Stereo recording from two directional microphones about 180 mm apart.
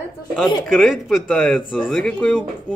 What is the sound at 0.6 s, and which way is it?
Speech, 5° left (ahead or behind).